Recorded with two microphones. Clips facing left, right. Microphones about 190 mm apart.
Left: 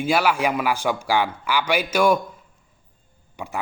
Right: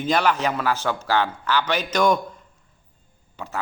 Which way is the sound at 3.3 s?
15° left (ahead or behind).